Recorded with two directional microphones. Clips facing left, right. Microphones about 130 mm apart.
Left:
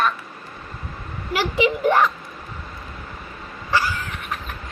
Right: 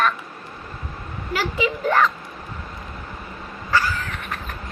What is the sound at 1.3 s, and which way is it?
Speech, 15° left (ahead or behind).